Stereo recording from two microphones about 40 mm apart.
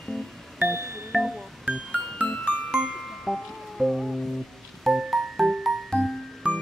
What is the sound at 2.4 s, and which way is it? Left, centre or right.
Music, left.